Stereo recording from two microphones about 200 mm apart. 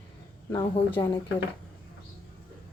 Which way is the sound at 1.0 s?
15° left (ahead or behind).